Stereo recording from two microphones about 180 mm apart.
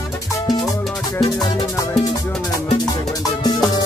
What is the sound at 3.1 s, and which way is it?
Music, 20° left (ahead or behind).